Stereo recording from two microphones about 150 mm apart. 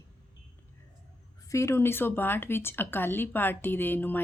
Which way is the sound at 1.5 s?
20° left (ahead or behind).